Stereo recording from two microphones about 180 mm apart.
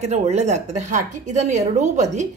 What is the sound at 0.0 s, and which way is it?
A woman's voice, 40° right (ahead or behind).